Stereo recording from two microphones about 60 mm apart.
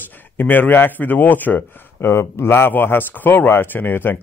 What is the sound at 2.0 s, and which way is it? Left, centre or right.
A man's voice, left.